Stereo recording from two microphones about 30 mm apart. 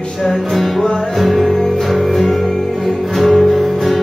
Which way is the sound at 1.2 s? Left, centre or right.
Centre.